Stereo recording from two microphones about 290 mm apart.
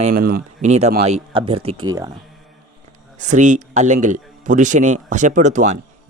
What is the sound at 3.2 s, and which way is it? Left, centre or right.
Speech, right.